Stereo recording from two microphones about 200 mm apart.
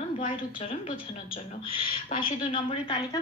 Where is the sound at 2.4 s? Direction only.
25° left (ahead or behind).